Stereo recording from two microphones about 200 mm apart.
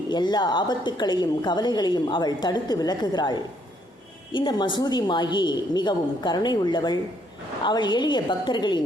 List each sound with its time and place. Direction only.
0.1 s a woman's voice: 20° left (ahead or behind)